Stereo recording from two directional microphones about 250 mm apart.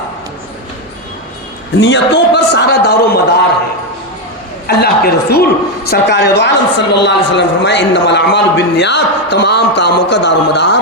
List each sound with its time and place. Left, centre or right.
1.8 s a woman's voice: left
4.6 s a woman's voice: left